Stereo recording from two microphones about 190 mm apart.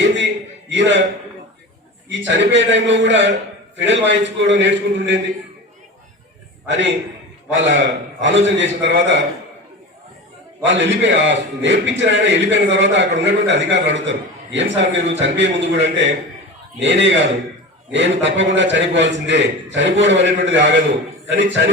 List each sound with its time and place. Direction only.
0.7 s a man's voice: 70° right (ahead or behind)
2.0 s a man's voice: 70° right (ahead or behind)
6.7 s a man's voice: 70° right (ahead or behind)
10.7 s a man's voice: 70° right (ahead or behind)